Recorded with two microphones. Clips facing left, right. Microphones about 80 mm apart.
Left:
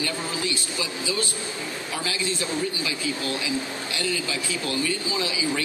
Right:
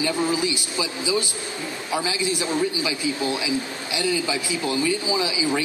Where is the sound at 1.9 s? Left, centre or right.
Centre.